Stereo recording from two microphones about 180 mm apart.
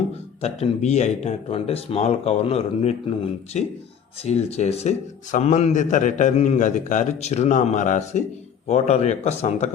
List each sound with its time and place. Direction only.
0.1 s a man's voice: 35° left (ahead or behind)